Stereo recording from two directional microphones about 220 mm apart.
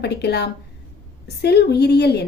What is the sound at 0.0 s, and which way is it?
A woman's voice, 50° left (ahead or behind).